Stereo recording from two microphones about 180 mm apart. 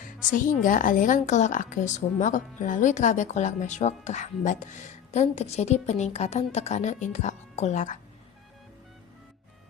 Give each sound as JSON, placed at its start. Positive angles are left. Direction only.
{"t": 0.2, "sound": "a woman's voice", "side_deg": 45}